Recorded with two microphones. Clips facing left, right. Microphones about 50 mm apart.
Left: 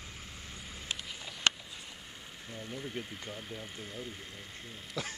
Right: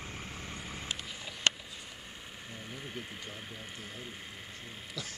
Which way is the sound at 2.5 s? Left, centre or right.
Centre.